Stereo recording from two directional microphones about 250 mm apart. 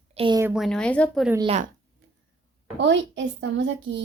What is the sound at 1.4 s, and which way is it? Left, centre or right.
Speech, right.